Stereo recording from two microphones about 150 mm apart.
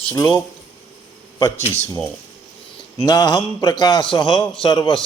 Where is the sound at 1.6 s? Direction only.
45° left (ahead or behind).